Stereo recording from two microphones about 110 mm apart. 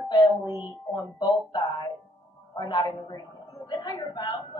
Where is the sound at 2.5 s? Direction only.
40° left (ahead or behind).